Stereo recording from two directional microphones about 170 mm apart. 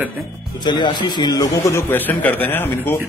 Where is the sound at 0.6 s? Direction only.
25° left (ahead or behind).